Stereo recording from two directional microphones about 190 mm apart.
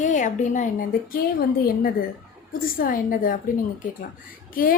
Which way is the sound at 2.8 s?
45° left (ahead or behind).